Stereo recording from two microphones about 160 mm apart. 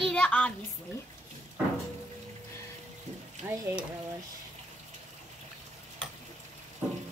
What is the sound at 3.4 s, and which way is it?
Speech, 15° right (ahead or behind).